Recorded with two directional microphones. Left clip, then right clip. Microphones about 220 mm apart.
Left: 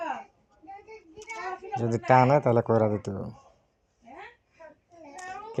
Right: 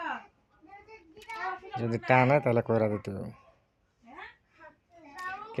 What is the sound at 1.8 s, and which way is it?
Speech, 5° right (ahead or behind).